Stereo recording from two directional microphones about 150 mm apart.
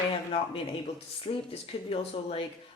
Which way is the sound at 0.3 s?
40° left (ahead or behind).